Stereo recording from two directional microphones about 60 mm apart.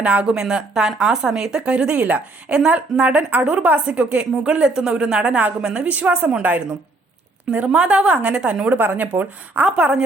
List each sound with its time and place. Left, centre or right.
0.0 s speech: right
2.6 s a woman's voice: centre
7.5 s a woman's voice: right
8.7 s a woman's voice: right